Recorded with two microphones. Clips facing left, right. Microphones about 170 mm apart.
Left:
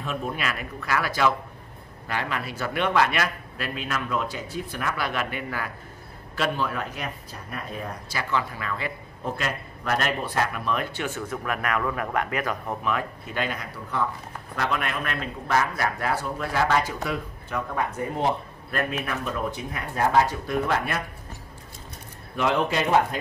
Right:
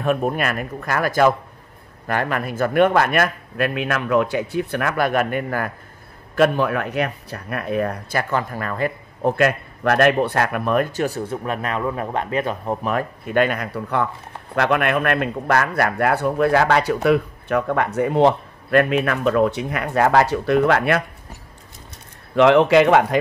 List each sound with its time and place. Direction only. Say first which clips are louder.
0.0 s speech: right 9 dB; 55° right (ahead or behind); by 12.7 s 30° right (ahead or behind)
12.8 s a man's voice: right 5 dB; 50° right (ahead or behind); by 21.0 s 70° right (ahead or behind)
22.3 s speech: right 11 dB; 90° right